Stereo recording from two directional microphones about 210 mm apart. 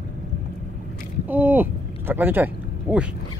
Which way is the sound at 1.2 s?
10° right (ahead or behind).